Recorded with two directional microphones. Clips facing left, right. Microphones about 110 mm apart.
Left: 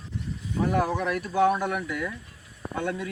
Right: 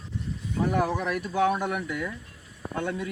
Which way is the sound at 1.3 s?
15° left (ahead or behind).